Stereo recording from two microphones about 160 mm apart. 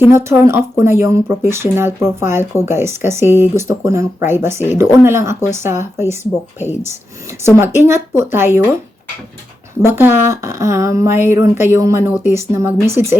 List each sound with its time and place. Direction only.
0.1 s speech: 15° right (ahead or behind)
7.3 s speech: 15° right (ahead or behind)
9.8 s speech: 15° right (ahead or behind)